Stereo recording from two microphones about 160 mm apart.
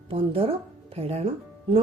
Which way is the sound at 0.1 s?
35° right (ahead or behind).